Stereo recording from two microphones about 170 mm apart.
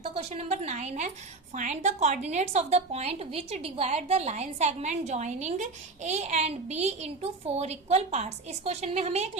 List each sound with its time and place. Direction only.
0.1 s a woman's voice: 35° right (ahead or behind)